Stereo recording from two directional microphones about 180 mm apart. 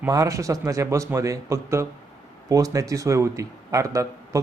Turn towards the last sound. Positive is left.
turn(degrees=-15)  # may be behind; listen again after turning